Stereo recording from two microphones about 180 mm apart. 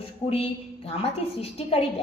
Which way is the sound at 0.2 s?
35° left (ahead or behind).